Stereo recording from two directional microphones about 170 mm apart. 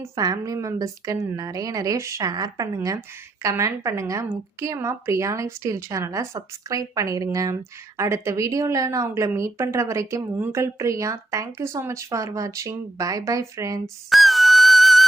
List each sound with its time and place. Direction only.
0.0 s a woman's voice: 20° right (ahead or behind)
13.8 s music: centre (ahead or behind)